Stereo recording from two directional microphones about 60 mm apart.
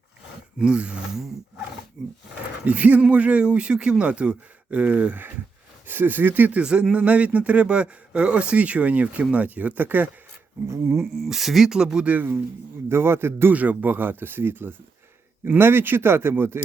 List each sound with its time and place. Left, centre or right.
0.6 s speech: centre
2.6 s speech: right
6.6 s speech: centre
10.7 s a man's voice: right
11.2 s speech: centre
12.0 s speech: right
12.9 s a man's voice: right
13.5 s speech: right